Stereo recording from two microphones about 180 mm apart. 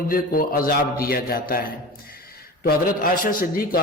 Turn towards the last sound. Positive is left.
turn(degrees=55)  # may be behind; listen again after turning